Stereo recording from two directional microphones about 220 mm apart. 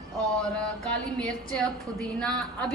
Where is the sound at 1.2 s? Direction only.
5° left (ahead or behind).